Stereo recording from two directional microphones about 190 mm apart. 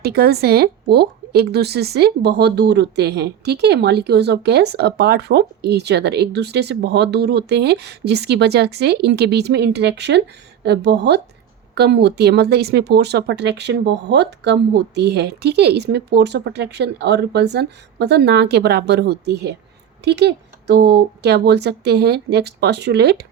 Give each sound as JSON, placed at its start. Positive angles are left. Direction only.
{"t": 0.0, "sound": "speech", "side_deg": -55}